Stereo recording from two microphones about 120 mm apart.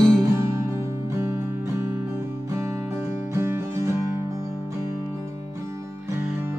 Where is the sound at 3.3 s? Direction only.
20° right (ahead or behind).